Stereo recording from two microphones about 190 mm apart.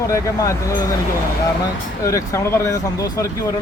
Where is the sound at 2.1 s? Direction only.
15° left (ahead or behind).